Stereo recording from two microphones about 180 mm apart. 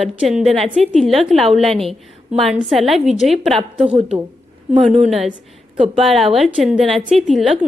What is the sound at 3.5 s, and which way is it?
Speech, 35° right (ahead or behind).